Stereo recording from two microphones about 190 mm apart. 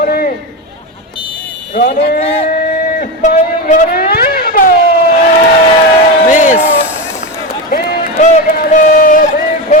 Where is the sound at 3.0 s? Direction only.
45° left (ahead or behind).